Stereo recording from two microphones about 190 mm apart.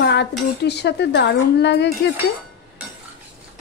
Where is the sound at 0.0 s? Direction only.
65° left (ahead or behind).